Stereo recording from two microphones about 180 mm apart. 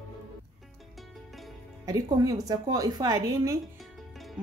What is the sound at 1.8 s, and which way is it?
A woman's voice, 20° right (ahead or behind).